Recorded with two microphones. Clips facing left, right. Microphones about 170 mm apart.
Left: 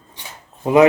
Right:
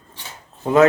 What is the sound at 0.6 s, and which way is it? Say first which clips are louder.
Speech: left 2 dB; 15° left (ahead or behind).